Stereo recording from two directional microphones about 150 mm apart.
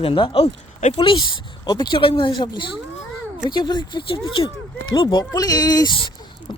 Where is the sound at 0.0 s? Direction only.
35° left (ahead or behind).